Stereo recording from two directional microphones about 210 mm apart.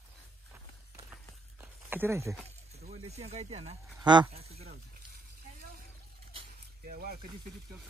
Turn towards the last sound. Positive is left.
turn(degrees=-45)  # may be behind; listen again after turning